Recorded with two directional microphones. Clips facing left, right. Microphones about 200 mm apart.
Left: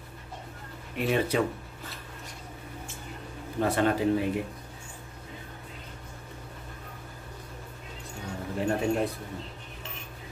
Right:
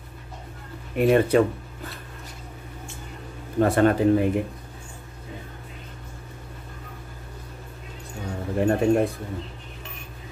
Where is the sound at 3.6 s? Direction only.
55° right (ahead or behind).